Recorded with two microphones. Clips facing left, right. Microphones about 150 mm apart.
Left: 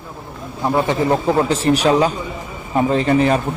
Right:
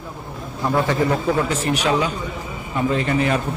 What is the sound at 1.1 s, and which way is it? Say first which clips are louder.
Speech: left 4 dB; 35° left (ahead or behind).